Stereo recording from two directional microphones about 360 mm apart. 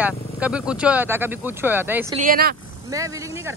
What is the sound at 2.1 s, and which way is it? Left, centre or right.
Speech, right.